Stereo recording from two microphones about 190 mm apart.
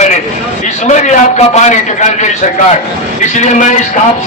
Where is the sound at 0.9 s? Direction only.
40° left (ahead or behind).